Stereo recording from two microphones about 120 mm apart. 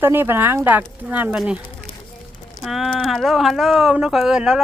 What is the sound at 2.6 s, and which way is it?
Speech, centre (ahead or behind).